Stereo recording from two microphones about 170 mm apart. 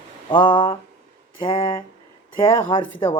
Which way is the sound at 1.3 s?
30° left (ahead or behind).